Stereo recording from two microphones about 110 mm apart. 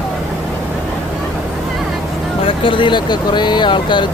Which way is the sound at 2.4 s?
50° left (ahead or behind).